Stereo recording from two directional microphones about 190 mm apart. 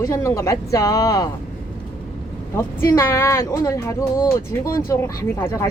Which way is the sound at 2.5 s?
15° left (ahead or behind).